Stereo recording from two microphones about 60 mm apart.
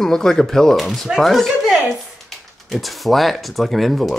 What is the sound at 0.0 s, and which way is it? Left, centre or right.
Speech, centre.